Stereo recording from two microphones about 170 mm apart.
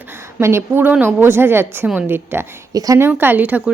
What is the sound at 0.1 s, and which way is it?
A woman's voice, 15° right (ahead or behind).